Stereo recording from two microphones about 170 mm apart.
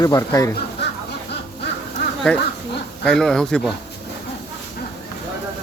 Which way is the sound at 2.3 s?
5° left (ahead or behind).